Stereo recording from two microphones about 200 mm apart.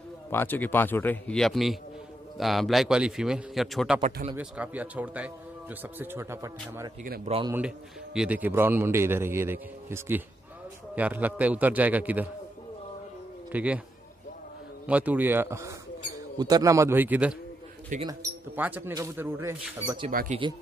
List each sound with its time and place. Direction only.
0.3 s a man's voice: 10° left (ahead or behind); by 6.9 s 15° right (ahead or behind)
7.2 s a man's voice: 25° right (ahead or behind)
7.5 s a man's voice: 5° right (ahead or behind)
13.5 s speech: 5° right (ahead or behind)
14.9 s a man's voice: 5° right (ahead or behind)
20.1 s speech: 45° right (ahead or behind)